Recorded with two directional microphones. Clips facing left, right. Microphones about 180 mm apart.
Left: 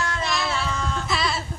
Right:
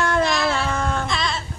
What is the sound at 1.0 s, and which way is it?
Goat, 5° left (ahead or behind).